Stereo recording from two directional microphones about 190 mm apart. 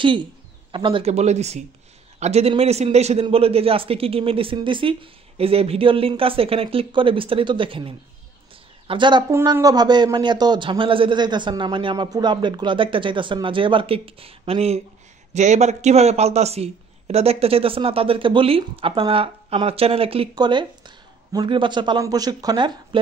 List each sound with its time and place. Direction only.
0.0 s speech: 25° right (ahead or behind)